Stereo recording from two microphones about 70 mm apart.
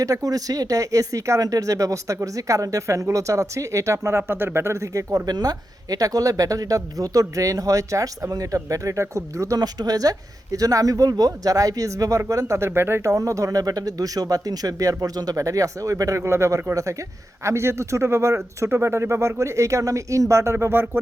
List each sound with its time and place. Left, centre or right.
0.0 s speech: right
5.2 s speech: right
9.6 s speech: right
16.2 s speech: right